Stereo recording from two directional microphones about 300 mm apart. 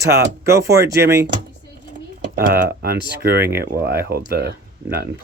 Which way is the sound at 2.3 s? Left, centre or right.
Right.